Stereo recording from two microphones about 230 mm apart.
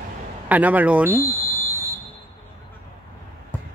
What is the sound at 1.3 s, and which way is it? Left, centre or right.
Fire alarm, centre.